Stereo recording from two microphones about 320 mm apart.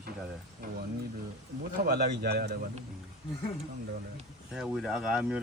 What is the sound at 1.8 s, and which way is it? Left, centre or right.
Speech, right.